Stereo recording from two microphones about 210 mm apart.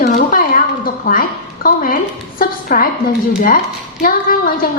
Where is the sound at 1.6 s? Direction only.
40° left (ahead or behind).